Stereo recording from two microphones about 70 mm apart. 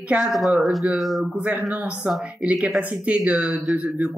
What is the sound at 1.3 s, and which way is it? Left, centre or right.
Speech, centre.